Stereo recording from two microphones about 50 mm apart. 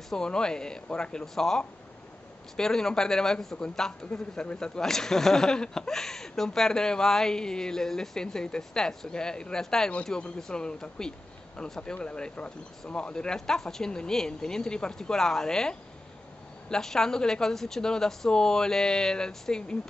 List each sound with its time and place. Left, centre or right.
0.1 s speech: centre